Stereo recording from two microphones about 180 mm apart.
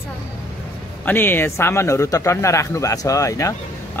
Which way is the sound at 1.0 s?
10° left (ahead or behind).